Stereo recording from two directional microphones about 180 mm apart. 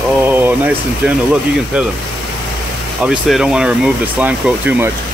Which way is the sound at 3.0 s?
5° right (ahead or behind).